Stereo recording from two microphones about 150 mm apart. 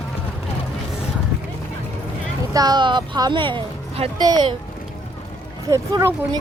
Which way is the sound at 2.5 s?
25° right (ahead or behind).